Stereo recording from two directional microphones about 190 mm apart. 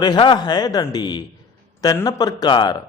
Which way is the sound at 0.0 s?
25° left (ahead or behind).